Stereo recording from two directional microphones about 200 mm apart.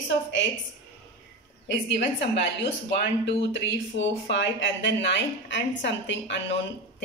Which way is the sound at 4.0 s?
65° left (ahead or behind).